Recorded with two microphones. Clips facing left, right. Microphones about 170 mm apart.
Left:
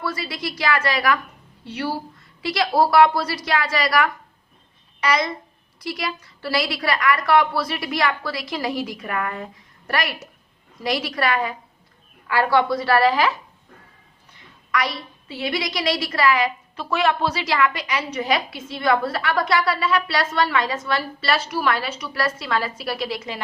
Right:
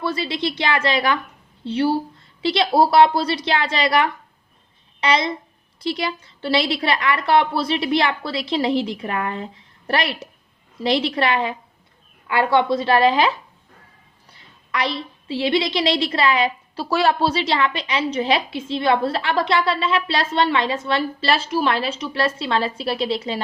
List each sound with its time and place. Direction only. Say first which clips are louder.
0.0 s a woman's voice: right 5 dB; 25° right (ahead or behind)
14.7 s a woman's voice: right 1 dB; 25° right (ahead or behind)